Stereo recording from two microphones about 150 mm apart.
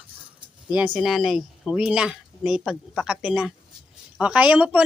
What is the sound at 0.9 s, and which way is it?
Speech, centre (ahead or behind).